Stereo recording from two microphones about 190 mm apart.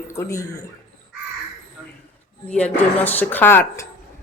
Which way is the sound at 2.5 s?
5° left (ahead or behind).